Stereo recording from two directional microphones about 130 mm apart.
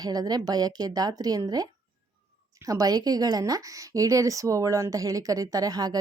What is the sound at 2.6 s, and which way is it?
Speech, 25° right (ahead or behind).